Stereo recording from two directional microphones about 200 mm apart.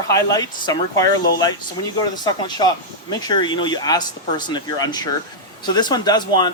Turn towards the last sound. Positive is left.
turn(degrees=20)  # may be behind; listen again after turning